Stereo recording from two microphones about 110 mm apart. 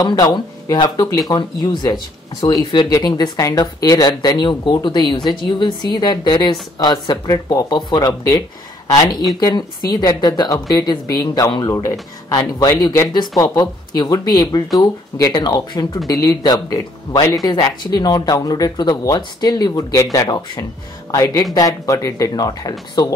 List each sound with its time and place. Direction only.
0.0 s speech: 40° left (ahead or behind)